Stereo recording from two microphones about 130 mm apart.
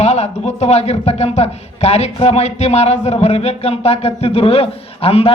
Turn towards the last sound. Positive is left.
turn(degrees=50)  # may be behind; listen again after turning